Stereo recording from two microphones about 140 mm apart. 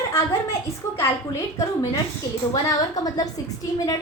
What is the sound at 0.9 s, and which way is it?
A woman's voice, 20° left (ahead or behind).